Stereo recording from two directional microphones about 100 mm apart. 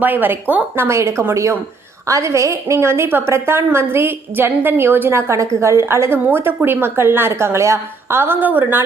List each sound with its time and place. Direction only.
0.0 s a woman's voice: 20° right (ahead or behind)